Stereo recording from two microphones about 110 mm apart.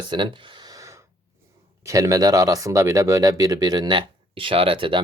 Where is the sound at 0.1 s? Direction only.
45° right (ahead or behind).